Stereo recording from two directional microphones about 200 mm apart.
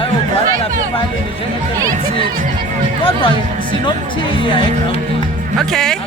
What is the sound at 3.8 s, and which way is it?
Speech, 25° left (ahead or behind).